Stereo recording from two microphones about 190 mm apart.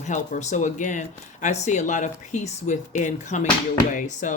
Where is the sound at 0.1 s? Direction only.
40° left (ahead or behind).